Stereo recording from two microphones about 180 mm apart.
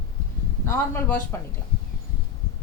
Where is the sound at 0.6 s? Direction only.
15° left (ahead or behind).